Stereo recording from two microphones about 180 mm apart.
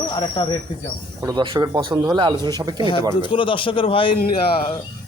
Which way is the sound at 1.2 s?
25° right (ahead or behind).